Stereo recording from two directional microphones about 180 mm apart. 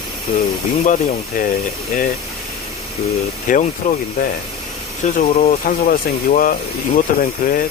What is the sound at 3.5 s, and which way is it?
Speech, 50° left (ahead or behind).